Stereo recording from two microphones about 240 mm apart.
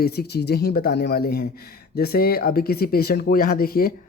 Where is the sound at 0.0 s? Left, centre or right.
Left.